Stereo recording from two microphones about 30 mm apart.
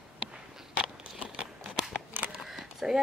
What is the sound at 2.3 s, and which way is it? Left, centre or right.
Camera, centre.